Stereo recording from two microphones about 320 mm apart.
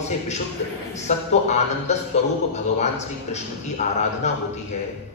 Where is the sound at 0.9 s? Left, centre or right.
Left.